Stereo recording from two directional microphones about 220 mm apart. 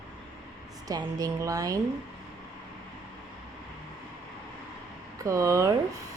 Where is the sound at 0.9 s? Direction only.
15° right (ahead or behind).